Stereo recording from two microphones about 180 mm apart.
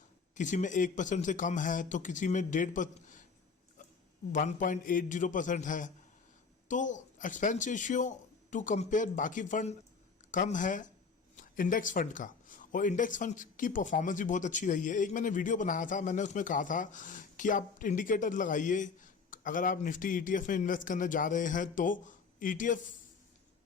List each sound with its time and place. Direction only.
0.3 s speech: 45° left (ahead or behind)
4.3 s speech: 45° left (ahead or behind)